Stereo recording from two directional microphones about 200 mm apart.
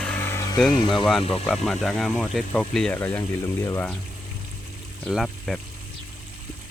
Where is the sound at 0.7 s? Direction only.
25° left (ahead or behind).